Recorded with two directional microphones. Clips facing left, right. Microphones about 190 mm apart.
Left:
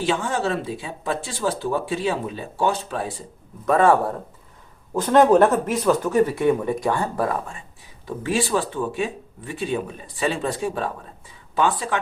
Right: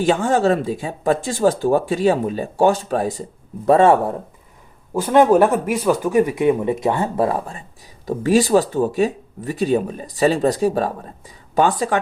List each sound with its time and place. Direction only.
0.0 s speech: 45° right (ahead or behind)
3.7 s speech: 25° right (ahead or behind)
4.9 s speech: 10° right (ahead or behind); by 11.9 s 45° right (ahead or behind)